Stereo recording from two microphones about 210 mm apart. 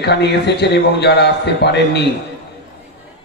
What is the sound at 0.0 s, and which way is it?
A man's voice, 55° left (ahead or behind).